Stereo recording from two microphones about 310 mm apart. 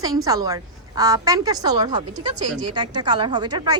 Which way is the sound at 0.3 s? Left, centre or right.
Centre.